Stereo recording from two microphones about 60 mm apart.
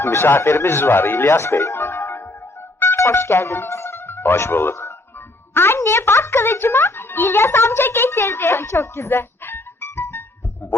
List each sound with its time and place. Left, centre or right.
0.0 s a child's voice: left